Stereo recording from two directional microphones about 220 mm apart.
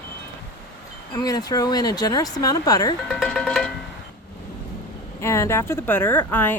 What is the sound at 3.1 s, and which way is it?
Speech, centre (ahead or behind).